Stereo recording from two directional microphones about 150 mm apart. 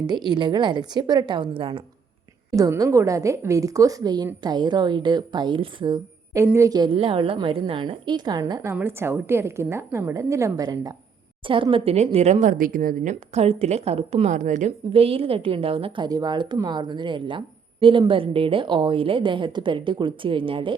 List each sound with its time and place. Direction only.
0.3 s a woman's voice: 30° right (ahead or behind)
2.6 s a woman's voice: 20° right (ahead or behind)
6.4 s a woman's voice: 20° right (ahead or behind)
8.7 s a woman's voice: 15° right (ahead or behind)
11.4 s a woman's voice: 35° right (ahead or behind); by 13.1 s 65° right (ahead or behind)
13.3 s a woman's voice: 45° right (ahead or behind)
14.9 s a woman's voice: 40° right (ahead or behind)